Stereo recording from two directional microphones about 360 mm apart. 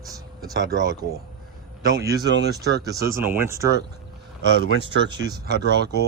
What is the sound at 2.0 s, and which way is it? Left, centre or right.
Speech, right.